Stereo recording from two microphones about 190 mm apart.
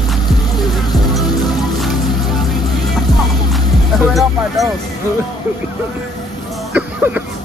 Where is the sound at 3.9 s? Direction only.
Centre (ahead or behind).